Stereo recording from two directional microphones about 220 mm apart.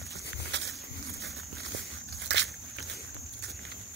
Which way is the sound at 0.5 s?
55° right (ahead or behind).